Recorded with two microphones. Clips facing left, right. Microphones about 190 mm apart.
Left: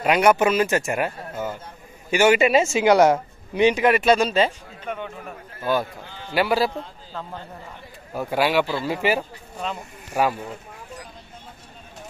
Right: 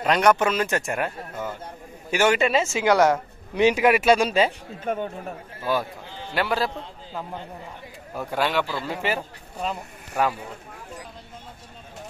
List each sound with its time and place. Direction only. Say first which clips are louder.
0.0 s speech: left 2 dB; 10° left (ahead or behind)
3.5 s speech: left 1 dB; 5° right (ahead or behind)
4.8 s a man's voice: right 4 dB; 40° right (ahead or behind)
6.3 s speech: left 4 dB; 5° left (ahead or behind)
8.1 s speech: left 4 dB; 5° left (ahead or behind)